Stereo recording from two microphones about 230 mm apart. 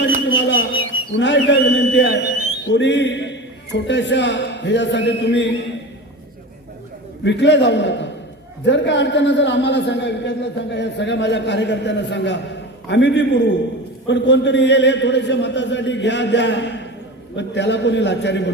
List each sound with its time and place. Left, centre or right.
0.3 s a sound: left
1.1 s a man's voice: left
7.3 s a man's voice: left